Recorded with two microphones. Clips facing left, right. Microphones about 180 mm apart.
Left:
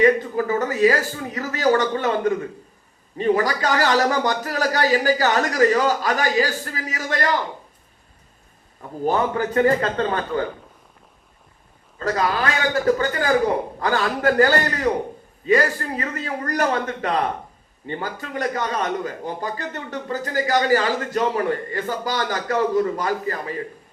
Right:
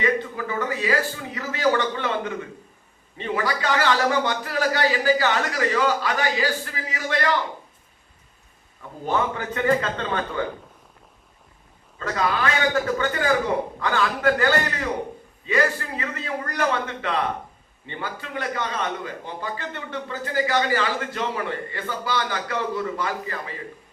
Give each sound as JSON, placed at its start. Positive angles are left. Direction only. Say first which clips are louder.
{"t": 0.0, "sound": "a man's voice", "louder": "left 7 dB", "side_deg": 40}
{"t": 9.0, "sound": "a man's voice", "louder": "left 4 dB", "side_deg": 40}
{"t": 11.9, "sound": "a man's voice", "louder": "left 3 dB", "side_deg": 40}